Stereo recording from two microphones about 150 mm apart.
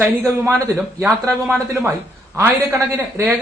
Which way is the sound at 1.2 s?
5° left (ahead or behind).